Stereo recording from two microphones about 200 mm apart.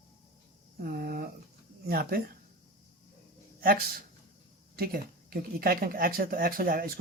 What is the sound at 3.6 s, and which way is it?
Speech, 50° right (ahead or behind).